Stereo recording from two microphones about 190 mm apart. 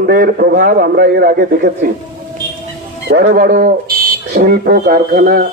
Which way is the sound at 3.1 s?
50° right (ahead or behind).